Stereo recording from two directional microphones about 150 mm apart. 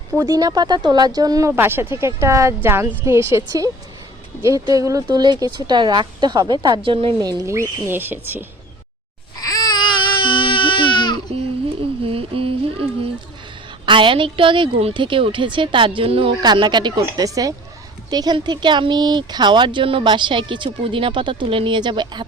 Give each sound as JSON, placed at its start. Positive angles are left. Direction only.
{"t": 0.2, "sound": "a woman's voice", "side_deg": -25}
{"t": 9.4, "sound": "baby cry", "side_deg": 25}
{"t": 12.0, "sound": "child singing", "side_deg": -40}
{"t": 13.8, "sound": "speech", "side_deg": -35}